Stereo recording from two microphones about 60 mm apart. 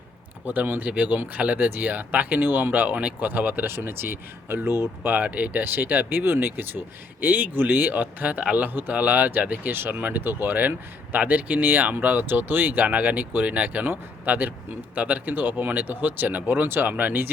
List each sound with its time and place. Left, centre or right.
0.4 s speech: right
5.0 s speech: right